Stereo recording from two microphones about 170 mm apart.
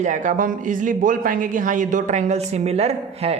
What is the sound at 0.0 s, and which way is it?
Speech, 45° right (ahead or behind).